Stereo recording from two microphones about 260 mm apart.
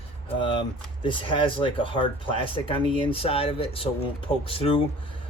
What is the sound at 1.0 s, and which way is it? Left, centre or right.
Speech, centre.